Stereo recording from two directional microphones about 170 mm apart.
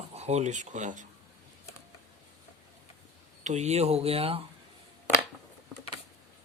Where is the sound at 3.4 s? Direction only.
45° right (ahead or behind).